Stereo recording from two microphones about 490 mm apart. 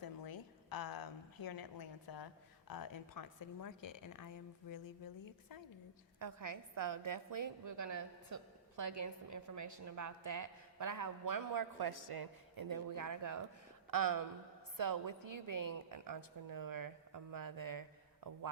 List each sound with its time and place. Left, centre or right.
0.0 s a woman's voice: left
6.1 s a woman's voice: right